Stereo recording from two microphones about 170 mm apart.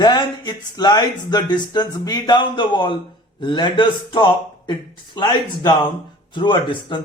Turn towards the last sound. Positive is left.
turn(degrees=30)  # may be behind; listen again after turning